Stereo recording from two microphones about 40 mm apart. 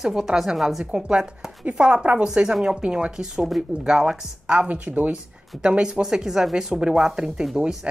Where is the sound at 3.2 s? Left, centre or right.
Centre.